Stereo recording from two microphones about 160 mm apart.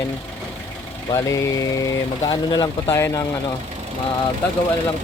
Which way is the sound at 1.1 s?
20° left (ahead or behind).